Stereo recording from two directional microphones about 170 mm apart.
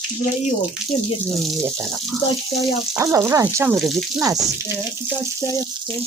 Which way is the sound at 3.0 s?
15° right (ahead or behind).